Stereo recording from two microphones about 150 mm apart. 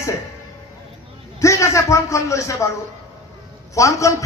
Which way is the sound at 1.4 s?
20° left (ahead or behind).